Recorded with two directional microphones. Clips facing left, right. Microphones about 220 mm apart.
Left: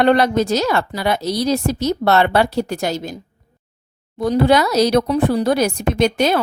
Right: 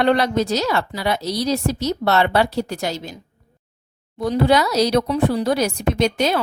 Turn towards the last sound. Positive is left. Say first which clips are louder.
# left 3 dB
turn(degrees=55)  # may be behind; listen again after turning